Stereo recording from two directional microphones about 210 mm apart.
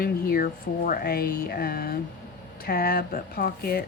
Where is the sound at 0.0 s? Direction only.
45° left (ahead or behind).